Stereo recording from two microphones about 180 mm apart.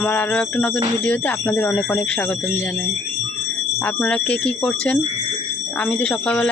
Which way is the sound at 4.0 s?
5° left (ahead or behind).